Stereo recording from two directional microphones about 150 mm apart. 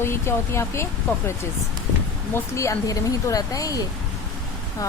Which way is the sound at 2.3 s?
20° left (ahead or behind).